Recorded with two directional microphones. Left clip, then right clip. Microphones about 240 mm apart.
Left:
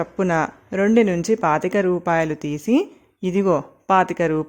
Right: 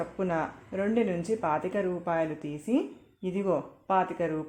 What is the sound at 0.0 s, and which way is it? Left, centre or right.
Speech, left.